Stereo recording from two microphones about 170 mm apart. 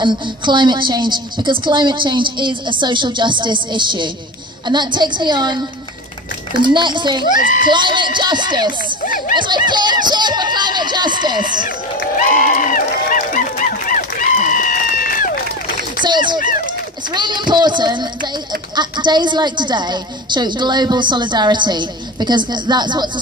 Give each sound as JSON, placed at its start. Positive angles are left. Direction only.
{"t": 0.0, "sound": "a woman's voice", "side_deg": -25}
{"t": 6.6, "sound": "a woman's voice", "side_deg": -25}
{"t": 7.3, "sound": "speech", "side_deg": 50}
{"t": 7.6, "sound": "a woman's voice", "side_deg": -25}
{"t": 11.6, "sound": "a sound", "side_deg": 50}
{"t": 16.0, "sound": "a sound", "side_deg": -25}
{"t": 17.1, "sound": "a woman's voice", "side_deg": -25}